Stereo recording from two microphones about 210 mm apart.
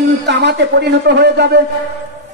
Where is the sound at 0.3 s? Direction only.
55° right (ahead or behind).